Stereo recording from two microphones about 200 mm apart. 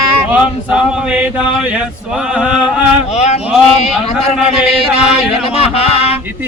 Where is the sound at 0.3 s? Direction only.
5° right (ahead or behind).